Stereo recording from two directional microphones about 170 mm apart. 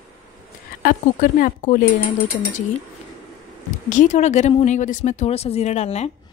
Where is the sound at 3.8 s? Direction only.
45° left (ahead or behind).